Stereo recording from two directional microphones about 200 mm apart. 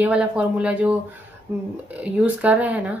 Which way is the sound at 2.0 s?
5° right (ahead or behind).